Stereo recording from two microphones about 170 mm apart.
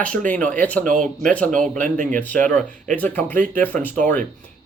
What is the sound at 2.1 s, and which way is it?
Speech, 10° left (ahead or behind).